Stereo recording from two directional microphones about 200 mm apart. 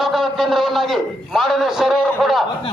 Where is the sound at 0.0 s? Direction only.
Centre (ahead or behind).